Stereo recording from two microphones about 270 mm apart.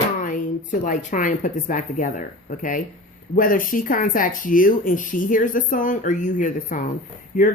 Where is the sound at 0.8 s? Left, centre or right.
Left.